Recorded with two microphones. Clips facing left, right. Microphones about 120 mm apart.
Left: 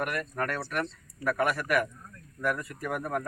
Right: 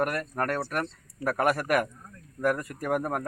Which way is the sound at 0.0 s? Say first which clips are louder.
Right 3 dB; 40° right (ahead or behind).